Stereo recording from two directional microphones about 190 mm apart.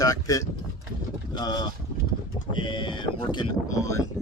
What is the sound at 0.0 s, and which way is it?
Vehicle, 20° left (ahead or behind).